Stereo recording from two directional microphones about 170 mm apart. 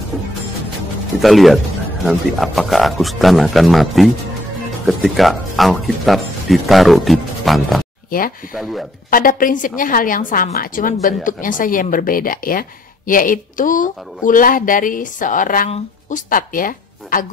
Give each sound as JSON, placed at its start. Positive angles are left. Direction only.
{"t": 1.2, "sound": "speech", "side_deg": 0}
{"t": 9.1, "sound": "a woman's voice", "side_deg": 55}